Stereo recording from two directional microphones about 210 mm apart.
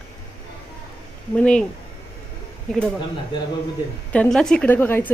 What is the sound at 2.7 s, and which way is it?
Speech, 5° left (ahead or behind).